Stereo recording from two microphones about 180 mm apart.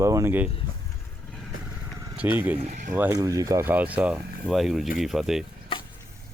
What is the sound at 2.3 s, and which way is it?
Speech, 10° right (ahead or behind).